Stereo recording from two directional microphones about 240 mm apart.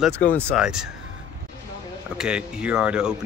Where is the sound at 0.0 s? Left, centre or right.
Centre.